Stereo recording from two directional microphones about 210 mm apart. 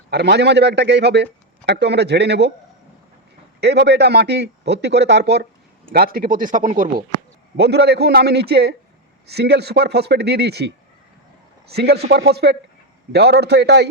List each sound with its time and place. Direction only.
0.1 s speech: 50° right (ahead or behind)
3.6 s speech: 55° right (ahead or behind); by 6.9 s 35° right (ahead or behind)
7.5 s speech: 50° right (ahead or behind)
11.7 s speech: 50° right (ahead or behind)